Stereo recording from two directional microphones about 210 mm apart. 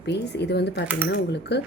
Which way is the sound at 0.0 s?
55° left (ahead or behind).